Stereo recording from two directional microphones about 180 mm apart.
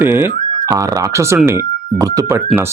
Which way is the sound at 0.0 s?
10° right (ahead or behind).